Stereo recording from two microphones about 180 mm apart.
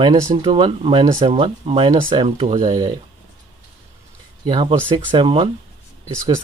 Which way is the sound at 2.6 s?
25° right (ahead or behind).